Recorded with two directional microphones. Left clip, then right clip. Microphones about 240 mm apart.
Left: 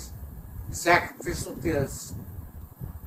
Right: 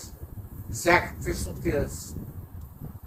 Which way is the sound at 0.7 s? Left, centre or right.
Left.